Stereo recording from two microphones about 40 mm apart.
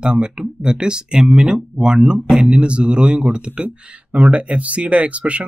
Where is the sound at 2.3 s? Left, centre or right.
Centre.